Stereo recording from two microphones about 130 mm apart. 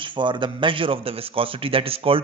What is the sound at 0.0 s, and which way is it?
A man's voice, 35° right (ahead or behind).